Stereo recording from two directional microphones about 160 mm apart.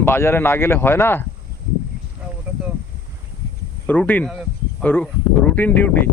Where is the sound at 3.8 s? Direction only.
10° left (ahead or behind).